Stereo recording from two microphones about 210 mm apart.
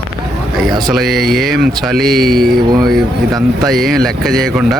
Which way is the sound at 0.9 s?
Centre (ahead or behind).